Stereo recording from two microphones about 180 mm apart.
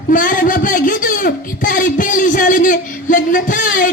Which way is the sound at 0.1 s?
50° left (ahead or behind).